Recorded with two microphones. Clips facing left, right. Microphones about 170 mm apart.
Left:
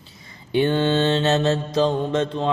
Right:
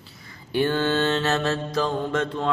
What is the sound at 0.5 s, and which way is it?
Mantra, 20° left (ahead or behind).